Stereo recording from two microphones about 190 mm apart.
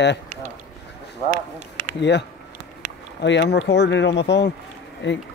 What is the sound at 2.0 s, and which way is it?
Speech, 65° left (ahead or behind).